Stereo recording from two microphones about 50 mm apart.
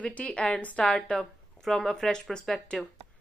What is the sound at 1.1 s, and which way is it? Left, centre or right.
Speech, centre.